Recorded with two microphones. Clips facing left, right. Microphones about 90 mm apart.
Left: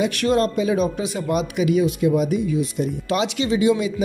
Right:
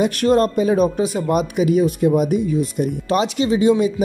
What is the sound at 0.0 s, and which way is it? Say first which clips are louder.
Speech: right 3 dB; 40° right (ahead or behind).